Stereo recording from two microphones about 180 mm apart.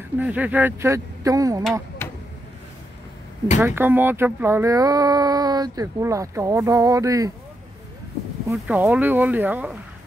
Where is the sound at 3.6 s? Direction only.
10° right (ahead or behind).